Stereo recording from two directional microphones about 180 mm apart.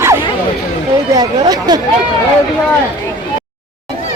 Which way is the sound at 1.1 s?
20° right (ahead or behind).